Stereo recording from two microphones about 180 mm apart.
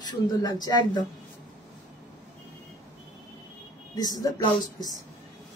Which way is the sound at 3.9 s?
20° left (ahead or behind).